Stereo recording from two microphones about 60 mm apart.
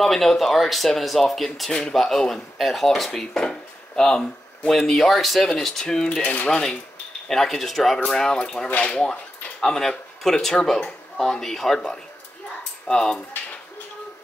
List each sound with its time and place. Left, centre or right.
0.0 s speech: centre
6.2 s speech: left
7.2 s speech: centre
8.6 s speech: left
8.9 s speech: centre